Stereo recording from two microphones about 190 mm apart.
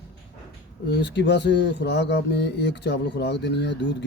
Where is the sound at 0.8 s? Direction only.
65° left (ahead or behind).